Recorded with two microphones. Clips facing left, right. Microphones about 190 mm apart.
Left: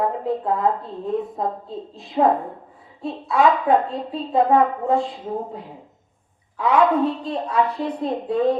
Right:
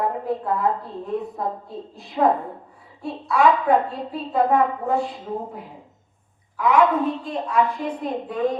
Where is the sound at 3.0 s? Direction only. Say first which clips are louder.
Left 1 dB; 20° left (ahead or behind).